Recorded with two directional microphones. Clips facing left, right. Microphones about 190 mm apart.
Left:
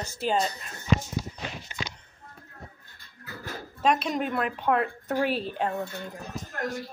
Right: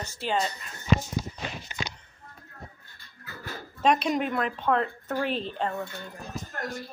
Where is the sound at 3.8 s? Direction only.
Centre (ahead or behind).